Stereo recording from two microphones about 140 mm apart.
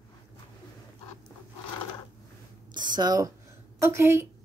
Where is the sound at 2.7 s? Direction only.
30° right (ahead or behind).